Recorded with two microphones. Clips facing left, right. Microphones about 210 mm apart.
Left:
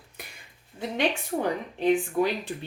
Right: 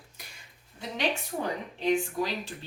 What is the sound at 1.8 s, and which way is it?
Speech, 55° left (ahead or behind).